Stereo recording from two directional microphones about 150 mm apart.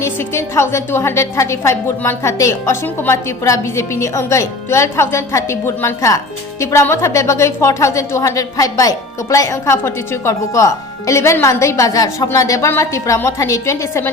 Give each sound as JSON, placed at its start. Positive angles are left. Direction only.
{"t": 0.0, "sound": "a woman's voice", "side_deg": 20}